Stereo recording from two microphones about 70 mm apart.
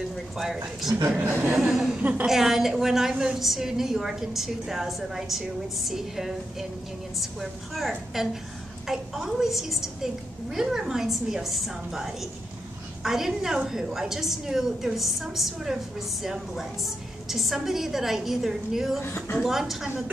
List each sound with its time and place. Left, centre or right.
0.1 s a sound: centre
1.1 s speech: right
1.5 s a woman's voice: centre
2.0 s speech: right
2.2 s a woman's voice: centre
19.0 s a woman's voice: left
19.4 s a woman's voice: centre